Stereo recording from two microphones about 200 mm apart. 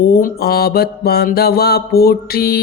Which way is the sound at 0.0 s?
45° left (ahead or behind).